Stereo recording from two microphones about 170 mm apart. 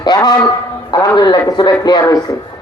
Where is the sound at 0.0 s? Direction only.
25° left (ahead or behind).